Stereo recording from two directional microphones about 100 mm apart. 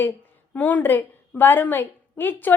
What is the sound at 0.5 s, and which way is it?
A woman's voice, 15° left (ahead or behind).